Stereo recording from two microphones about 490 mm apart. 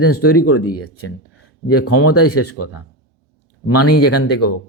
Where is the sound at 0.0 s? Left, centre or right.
Left.